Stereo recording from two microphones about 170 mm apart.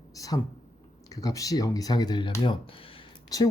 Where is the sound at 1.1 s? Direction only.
20° left (ahead or behind).